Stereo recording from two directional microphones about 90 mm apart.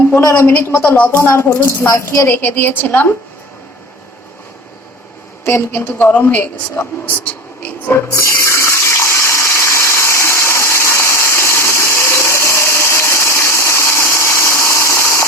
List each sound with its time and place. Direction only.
0.2 s a woman's voice: 30° left (ahead or behind)
5.5 s a woman's voice: 25° left (ahead or behind)
8.1 s water: 30° left (ahead or behind)